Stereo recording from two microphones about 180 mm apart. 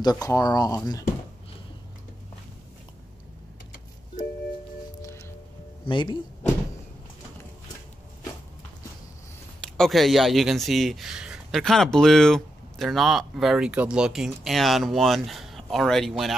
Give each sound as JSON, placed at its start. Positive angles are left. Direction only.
{"t": 0.0, "sound": "speech", "side_deg": 20}
{"t": 5.0, "sound": "music", "side_deg": 15}
{"t": 5.9, "sound": "speech", "side_deg": 25}
{"t": 9.8, "sound": "speech", "side_deg": 0}